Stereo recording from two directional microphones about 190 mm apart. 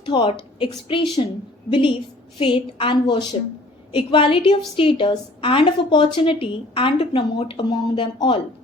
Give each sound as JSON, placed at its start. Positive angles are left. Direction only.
{"t": 0.0, "sound": "a woman's voice", "side_deg": 25}